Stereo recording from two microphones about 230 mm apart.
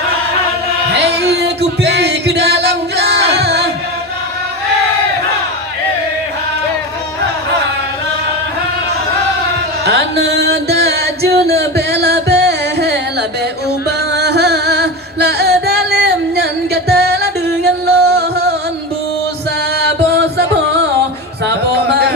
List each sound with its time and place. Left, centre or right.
1.2 s music: right
9.8 s music: right
14.1 s music: right
21.4 s a sound: right